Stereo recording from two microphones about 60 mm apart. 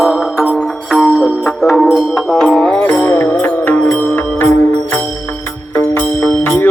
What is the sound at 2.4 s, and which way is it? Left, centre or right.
Music, centre.